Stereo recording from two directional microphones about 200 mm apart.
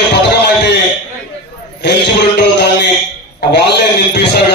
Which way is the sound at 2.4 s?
55° left (ahead or behind).